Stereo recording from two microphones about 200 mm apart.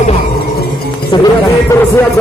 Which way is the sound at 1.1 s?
20° left (ahead or behind).